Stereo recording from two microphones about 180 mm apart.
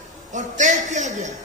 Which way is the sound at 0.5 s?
45° right (ahead or behind).